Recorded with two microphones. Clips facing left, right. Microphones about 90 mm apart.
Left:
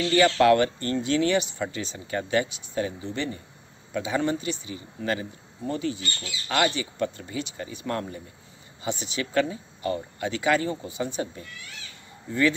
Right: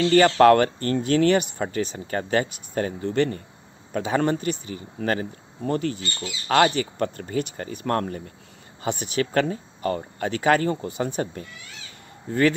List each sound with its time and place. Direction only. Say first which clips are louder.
0.1 s speech: right 3 dB; 45° right (ahead or behind)